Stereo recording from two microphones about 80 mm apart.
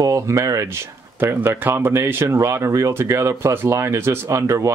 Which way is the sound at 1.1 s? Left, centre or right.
Right.